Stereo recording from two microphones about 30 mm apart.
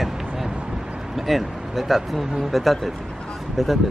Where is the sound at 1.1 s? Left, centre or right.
Centre.